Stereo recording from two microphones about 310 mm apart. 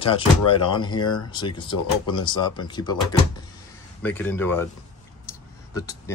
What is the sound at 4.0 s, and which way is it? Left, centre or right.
Speech, centre.